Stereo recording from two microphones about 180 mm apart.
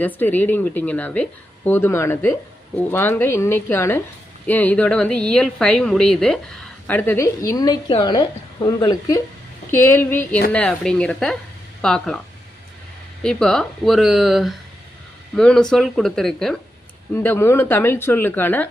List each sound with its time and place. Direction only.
0.0 s a woman's voice: 10° left (ahead or behind)
13.2 s speech: 5° left (ahead or behind)
17.2 s a woman's voice: 10° left (ahead or behind)